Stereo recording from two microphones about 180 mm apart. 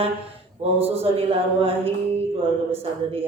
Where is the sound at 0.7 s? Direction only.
35° right (ahead or behind).